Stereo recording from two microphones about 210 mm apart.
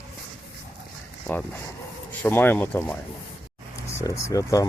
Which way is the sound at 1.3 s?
5° left (ahead or behind).